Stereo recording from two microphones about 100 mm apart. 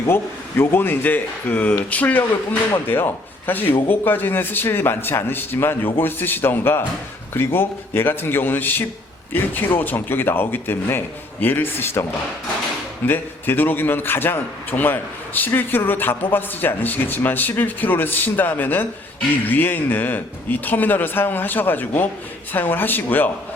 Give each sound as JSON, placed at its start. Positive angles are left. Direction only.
{"t": 0.1, "sound": "a man's voice", "side_deg": 25}
{"t": 13.1, "sound": "a man's voice", "side_deg": 20}